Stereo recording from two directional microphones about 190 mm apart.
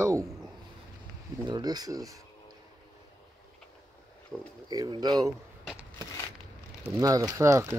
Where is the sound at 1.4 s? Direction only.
20° right (ahead or behind).